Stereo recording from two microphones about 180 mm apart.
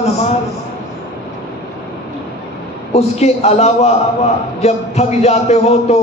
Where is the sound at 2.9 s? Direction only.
35° left (ahead or behind).